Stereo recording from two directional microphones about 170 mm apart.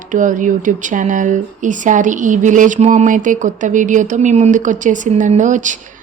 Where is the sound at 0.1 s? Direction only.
50° right (ahead or behind).